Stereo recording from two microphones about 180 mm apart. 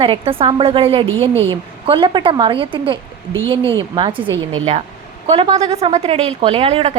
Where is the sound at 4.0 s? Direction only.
25° right (ahead or behind).